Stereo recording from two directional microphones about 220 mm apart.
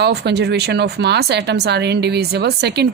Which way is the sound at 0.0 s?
50° right (ahead or behind).